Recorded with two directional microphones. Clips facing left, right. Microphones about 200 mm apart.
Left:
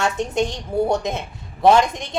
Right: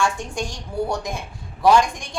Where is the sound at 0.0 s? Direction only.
20° left (ahead or behind).